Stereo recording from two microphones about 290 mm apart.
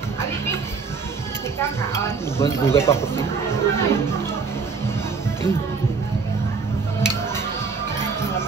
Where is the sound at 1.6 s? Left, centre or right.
Centre.